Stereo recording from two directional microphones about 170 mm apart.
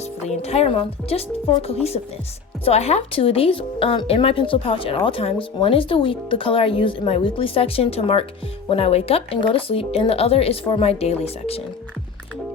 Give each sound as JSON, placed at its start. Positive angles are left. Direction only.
{"t": 0.2, "sound": "speech", "side_deg": 40}